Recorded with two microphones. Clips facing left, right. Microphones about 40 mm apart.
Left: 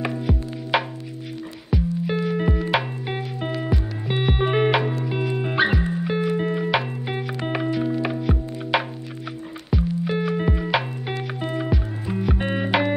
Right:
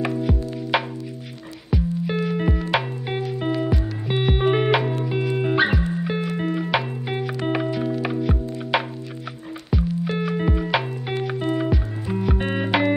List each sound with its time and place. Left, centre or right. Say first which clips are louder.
0.0 s music: right 2 dB; centre